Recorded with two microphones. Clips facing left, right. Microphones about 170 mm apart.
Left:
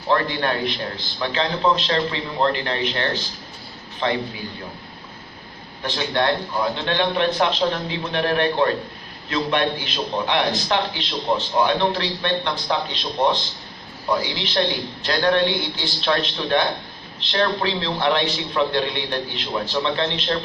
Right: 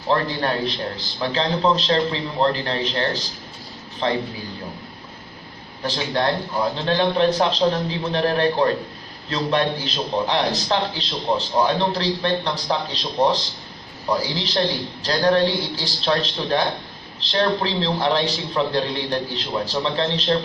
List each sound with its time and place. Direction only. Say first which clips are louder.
0.1 s a man's voice: even; 35° right (ahead or behind)
5.8 s a man's voice: even; 35° right (ahead or behind)
14.2 s a man's voice: even; 35° right (ahead or behind)